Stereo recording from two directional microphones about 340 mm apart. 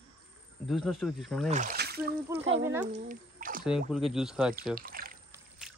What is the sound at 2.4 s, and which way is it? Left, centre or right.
Speech, right.